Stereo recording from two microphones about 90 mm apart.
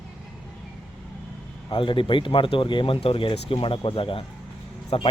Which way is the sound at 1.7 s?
75° left (ahead or behind).